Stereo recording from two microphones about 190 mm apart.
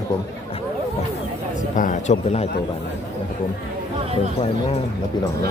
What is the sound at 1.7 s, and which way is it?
Speech, 40° left (ahead or behind).